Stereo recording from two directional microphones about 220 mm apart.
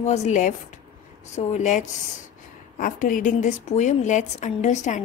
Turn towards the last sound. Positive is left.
turn(degrees=35)  # may be behind; listen again after turning